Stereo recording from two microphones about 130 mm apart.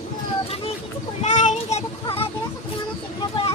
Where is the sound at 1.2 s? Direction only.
70° left (ahead or behind).